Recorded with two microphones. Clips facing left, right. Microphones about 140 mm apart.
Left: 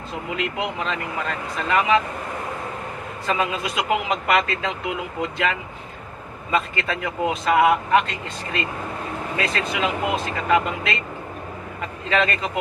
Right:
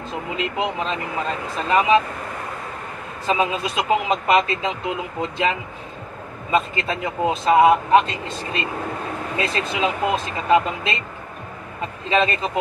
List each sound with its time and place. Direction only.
0.4 s speech: 25° right (ahead or behind)
3.3 s speech: 25° right (ahead or behind)
12.1 s speech: 25° right (ahead or behind)